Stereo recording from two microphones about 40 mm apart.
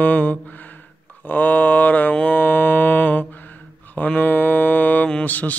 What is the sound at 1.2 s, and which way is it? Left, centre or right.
Mantra, left.